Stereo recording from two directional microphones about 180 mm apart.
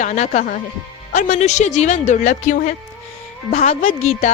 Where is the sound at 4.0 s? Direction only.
40° left (ahead or behind).